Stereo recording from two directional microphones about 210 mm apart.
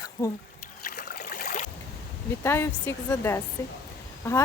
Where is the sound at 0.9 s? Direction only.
50° left (ahead or behind).